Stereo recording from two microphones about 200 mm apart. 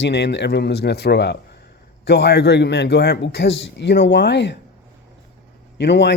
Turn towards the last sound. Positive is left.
turn(degrees=60)  # may be behind; listen again after turning